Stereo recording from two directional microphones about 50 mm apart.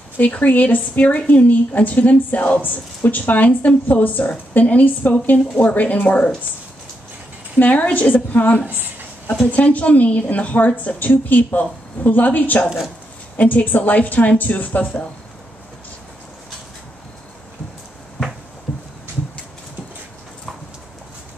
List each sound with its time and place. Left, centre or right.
0.2 s a woman's voice: left
7.5 s a woman's voice: left